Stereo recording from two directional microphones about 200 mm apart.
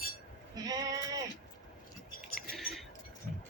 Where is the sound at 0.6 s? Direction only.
20° right (ahead or behind).